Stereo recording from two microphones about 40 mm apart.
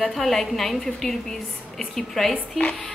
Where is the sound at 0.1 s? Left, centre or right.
Centre.